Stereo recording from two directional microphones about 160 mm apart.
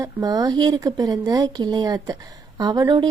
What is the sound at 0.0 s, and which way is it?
Speech, 20° right (ahead or behind).